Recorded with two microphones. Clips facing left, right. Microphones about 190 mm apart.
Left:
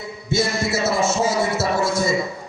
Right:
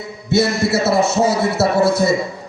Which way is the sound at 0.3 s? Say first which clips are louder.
Right 6 dB; 60° right (ahead or behind).